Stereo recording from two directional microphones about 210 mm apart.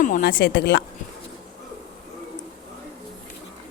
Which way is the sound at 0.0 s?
40° left (ahead or behind).